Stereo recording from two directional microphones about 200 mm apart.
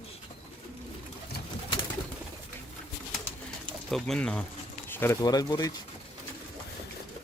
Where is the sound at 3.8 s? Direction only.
Centre (ahead or behind); by 5.7 s 20° left (ahead or behind).